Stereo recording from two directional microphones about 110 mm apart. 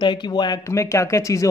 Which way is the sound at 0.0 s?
45° left (ahead or behind).